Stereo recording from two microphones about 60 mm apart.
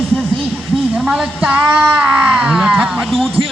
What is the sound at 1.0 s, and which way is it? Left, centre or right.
Speech, centre.